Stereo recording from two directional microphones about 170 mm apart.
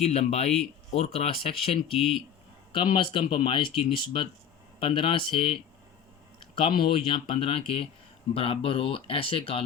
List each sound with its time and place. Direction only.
0.0 s speech: 40° left (ahead or behind)
1.9 s speech: centre (ahead or behind)
2.7 s speech: 30° left (ahead or behind)